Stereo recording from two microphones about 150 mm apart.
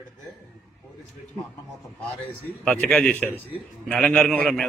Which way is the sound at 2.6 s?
5° left (ahead or behind).